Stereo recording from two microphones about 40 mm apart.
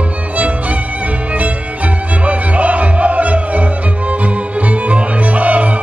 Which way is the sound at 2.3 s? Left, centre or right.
Right.